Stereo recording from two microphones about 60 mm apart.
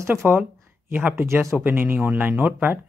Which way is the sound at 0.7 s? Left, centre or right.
Right.